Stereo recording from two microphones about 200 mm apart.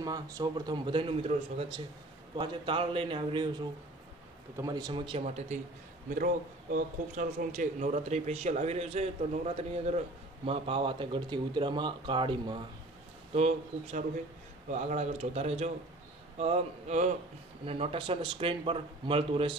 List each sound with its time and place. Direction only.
0.0 s speech: 20° right (ahead or behind)
6.0 s a man's voice: 45° right (ahead or behind); by 19.5 s 25° right (ahead or behind)